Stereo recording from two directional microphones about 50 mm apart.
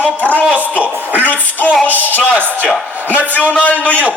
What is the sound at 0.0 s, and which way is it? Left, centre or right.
Music, left.